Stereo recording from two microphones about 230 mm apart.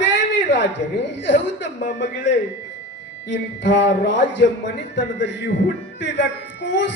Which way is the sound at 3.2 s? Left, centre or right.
Left.